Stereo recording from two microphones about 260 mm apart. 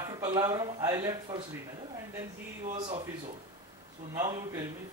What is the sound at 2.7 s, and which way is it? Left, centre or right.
Speech, centre.